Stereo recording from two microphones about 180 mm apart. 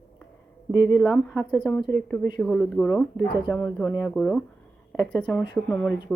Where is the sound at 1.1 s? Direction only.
5° left (ahead or behind).